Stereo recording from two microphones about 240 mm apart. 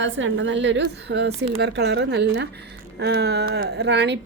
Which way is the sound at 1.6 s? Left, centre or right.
Right.